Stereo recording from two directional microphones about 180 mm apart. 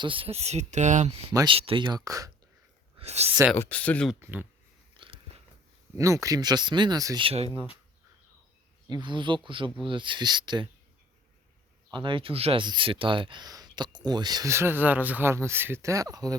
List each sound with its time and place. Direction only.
0.0 s speech: 30° right (ahead or behind)
1.3 s speech: 20° right (ahead or behind)
1.5 s speech: 30° right (ahead or behind)
3.0 s speech: 35° right (ahead or behind)
3.5 s speech: 10° left (ahead or behind)
4.2 s speech: 10° right (ahead or behind)
4.9 s biting: 30° right (ahead or behind)
6.0 s speech: 15° right (ahead or behind)
7.3 s speech: 30° right (ahead or behind)
8.9 s speech: 25° right (ahead or behind)
11.9 s speech: 25° right (ahead or behind)